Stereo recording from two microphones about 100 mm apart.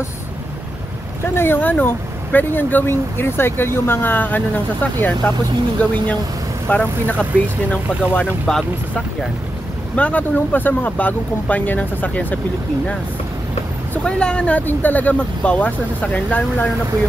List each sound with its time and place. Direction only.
1.3 s speech: 20° left (ahead or behind)
8.5 s speech: 5° left (ahead or behind)
9.9 s speech: 15° left (ahead or behind)
14.0 s speech: 10° left (ahead or behind)